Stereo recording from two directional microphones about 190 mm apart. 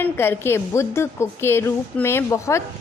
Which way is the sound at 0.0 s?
10° left (ahead or behind).